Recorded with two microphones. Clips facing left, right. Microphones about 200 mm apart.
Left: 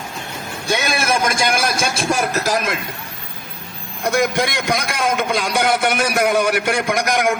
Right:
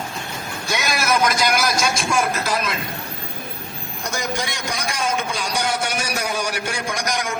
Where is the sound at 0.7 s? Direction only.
30° left (ahead or behind).